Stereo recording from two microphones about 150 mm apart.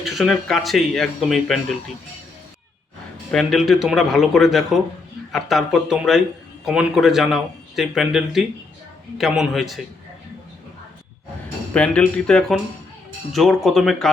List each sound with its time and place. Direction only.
0.0 s a man's voice: centre (ahead or behind)
3.3 s a man's voice: centre (ahead or behind)
11.7 s a man's voice: 5° left (ahead or behind)